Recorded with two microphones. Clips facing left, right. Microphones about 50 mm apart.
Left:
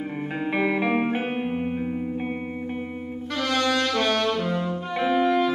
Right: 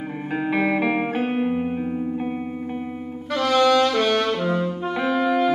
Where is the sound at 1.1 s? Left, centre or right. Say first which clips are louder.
Right 4 dB; centre.